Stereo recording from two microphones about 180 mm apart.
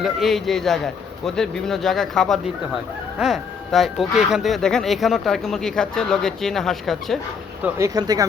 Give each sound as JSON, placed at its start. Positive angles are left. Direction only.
{"t": 0.0, "sound": "speech", "side_deg": 0}
{"t": 7.6, "sound": "speech", "side_deg": -15}